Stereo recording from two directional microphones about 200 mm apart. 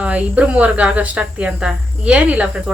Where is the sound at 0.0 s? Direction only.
5° right (ahead or behind).